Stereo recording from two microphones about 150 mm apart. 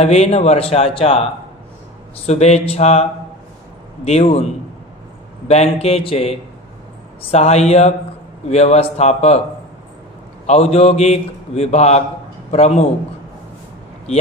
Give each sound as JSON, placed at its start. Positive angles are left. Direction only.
{"t": 0.0, "sound": "a man's voice", "side_deg": 45}
{"t": 2.2, "sound": "a man's voice", "side_deg": 45}
{"t": 5.5, "sound": "a man's voice", "side_deg": 45}
{"t": 10.4, "sound": "a man's voice", "side_deg": 45}